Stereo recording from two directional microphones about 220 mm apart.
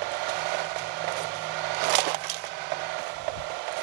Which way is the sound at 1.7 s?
50° right (ahead or behind).